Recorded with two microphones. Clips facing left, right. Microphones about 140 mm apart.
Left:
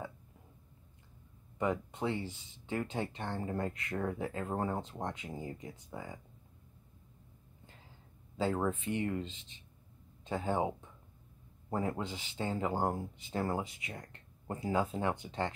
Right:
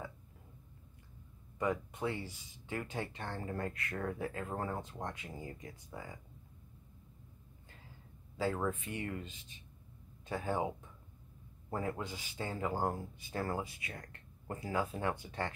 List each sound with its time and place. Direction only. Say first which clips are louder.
1.6 s speech: left 2 dB; 25° left (ahead or behind)
8.4 s speech: left 2 dB; 25° left (ahead or behind)